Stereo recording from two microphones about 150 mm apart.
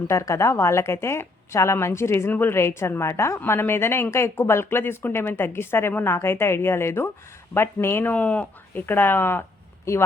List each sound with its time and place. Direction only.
0.1 s speech: 20° left (ahead or behind)